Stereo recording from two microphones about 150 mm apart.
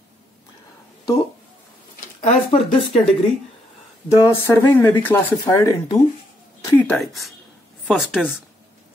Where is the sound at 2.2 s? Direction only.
45° left (ahead or behind).